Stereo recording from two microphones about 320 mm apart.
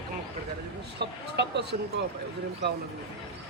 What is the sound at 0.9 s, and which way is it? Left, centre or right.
Speech, right.